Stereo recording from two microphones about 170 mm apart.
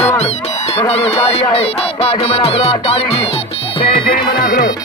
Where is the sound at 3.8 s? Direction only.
30° left (ahead or behind).